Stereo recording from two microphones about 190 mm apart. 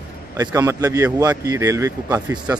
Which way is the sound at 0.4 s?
20° right (ahead or behind).